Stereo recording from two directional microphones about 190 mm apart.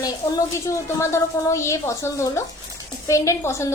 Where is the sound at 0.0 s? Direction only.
20° left (ahead or behind).